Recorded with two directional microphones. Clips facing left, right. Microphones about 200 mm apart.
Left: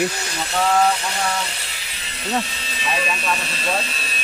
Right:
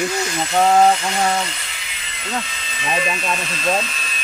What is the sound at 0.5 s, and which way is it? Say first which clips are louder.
Speech: right 4 dB; 35° right (ahead or behind).